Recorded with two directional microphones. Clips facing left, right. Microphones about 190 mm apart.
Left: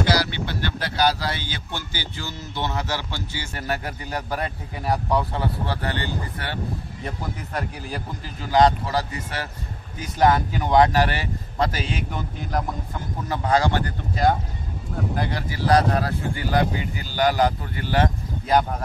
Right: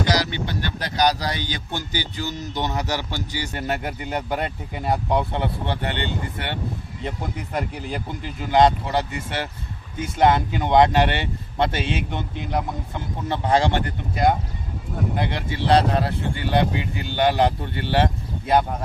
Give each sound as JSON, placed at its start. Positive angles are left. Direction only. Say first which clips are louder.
{"t": 0.0, "sound": "speech", "louder": "even", "side_deg": -20}